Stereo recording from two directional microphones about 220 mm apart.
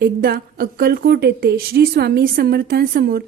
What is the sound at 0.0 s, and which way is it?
A woman's voice, 45° right (ahead or behind).